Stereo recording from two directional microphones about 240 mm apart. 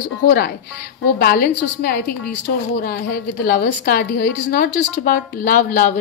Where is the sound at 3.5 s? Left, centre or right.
Left.